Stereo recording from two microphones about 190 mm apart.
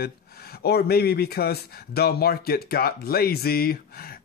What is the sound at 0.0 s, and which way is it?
Speech, 55° left (ahead or behind).